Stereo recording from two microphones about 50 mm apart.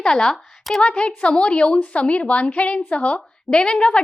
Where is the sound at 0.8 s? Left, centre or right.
Left.